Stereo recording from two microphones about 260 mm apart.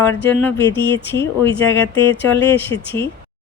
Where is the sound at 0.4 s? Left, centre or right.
Centre.